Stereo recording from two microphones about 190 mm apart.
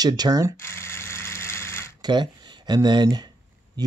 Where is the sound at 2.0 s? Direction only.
25° right (ahead or behind).